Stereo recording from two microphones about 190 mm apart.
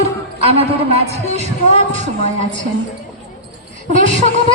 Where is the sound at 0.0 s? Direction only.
30° right (ahead or behind).